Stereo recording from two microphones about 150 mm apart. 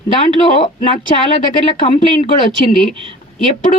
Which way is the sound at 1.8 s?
40° left (ahead or behind).